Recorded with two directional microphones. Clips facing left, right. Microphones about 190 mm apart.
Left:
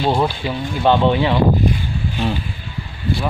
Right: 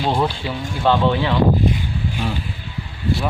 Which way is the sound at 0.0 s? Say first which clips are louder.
Left 2 dB; 5° left (ahead or behind).